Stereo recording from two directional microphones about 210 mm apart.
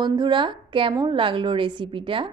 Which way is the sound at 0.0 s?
20° right (ahead or behind).